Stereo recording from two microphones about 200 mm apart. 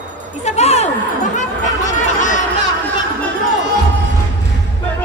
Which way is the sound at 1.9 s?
40° left (ahead or behind).